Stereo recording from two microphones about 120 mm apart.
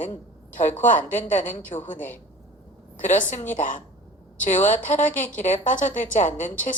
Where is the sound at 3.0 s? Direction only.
90° left.